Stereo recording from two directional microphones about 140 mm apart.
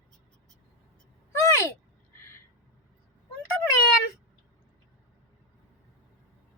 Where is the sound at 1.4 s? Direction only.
20° left (ahead or behind).